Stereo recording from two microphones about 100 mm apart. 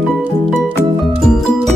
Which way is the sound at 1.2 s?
5° left (ahead or behind).